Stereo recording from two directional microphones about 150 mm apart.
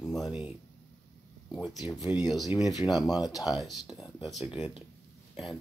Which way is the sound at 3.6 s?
Centre (ahead or behind).